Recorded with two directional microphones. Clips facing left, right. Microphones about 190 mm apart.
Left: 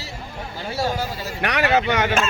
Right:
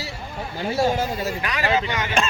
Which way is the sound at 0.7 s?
15° right (ahead or behind).